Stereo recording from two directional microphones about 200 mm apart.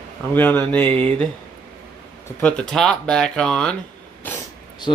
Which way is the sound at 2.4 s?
5° left (ahead or behind).